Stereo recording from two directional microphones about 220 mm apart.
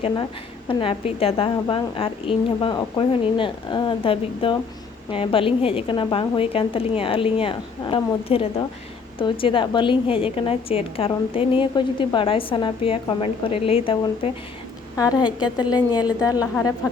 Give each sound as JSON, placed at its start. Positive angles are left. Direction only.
{"t": 0.7, "sound": "a woman's voice", "side_deg": 25}